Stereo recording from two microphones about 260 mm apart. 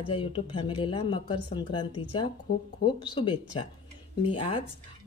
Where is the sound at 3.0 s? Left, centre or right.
Centre.